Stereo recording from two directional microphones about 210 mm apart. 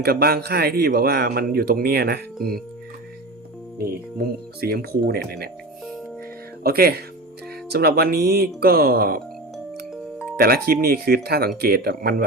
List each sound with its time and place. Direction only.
0.0 s a man's voice: 45° right (ahead or behind)
3.8 s a man's voice: 45° right (ahead or behind)
6.6 s a man's voice: 45° right (ahead or behind)
9.9 s music: centre (ahead or behind)
10.3 s a man's voice: 45° right (ahead or behind)